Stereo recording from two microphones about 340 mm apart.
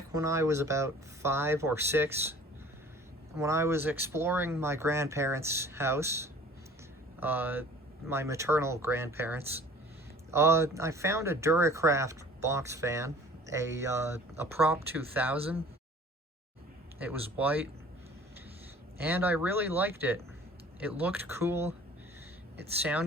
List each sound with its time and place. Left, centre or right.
0.1 s speech: centre
3.3 s speech: centre
17.0 s speech: centre
18.9 s speech: centre
22.8 s speech: centre